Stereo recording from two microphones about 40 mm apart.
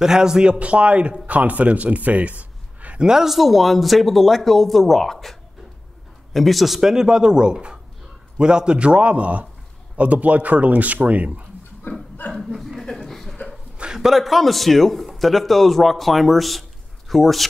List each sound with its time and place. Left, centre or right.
0.0 s a man's voice: centre; by 3.0 s right
3.0 s speech: centre
3.3 s a man's voice: centre
6.8 s a man's voice: centre; by 11.4 s right
11.9 s chuckle: left
12.5 s speech: centre
12.8 s chuckle: centre
13.7 s dog: centre
14.1 s a man's voice: centre